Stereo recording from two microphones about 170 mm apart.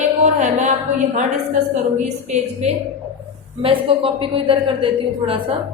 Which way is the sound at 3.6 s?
30° right (ahead or behind).